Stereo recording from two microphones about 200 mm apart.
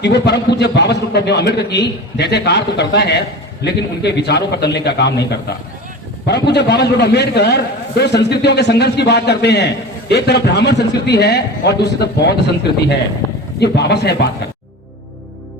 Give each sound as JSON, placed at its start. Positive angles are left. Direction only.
{"t": 0.0, "sound": "a man's voice", "side_deg": 55}
{"t": 13.6, "sound": "a man's voice", "side_deg": 55}